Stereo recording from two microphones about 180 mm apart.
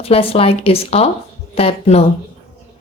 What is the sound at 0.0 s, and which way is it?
A woman's voice, 30° left (ahead or behind).